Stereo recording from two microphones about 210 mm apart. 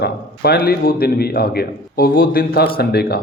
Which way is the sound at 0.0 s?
50° left (ahead or behind).